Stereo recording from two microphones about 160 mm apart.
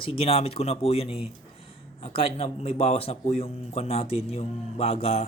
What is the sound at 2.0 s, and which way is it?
A man's voice, 35° left (ahead or behind).